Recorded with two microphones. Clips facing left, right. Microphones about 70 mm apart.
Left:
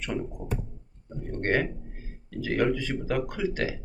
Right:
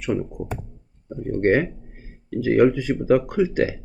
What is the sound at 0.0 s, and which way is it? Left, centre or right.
Speech, centre.